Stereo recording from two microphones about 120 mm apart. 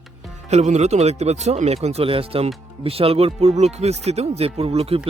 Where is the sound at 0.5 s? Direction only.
65° right (ahead or behind).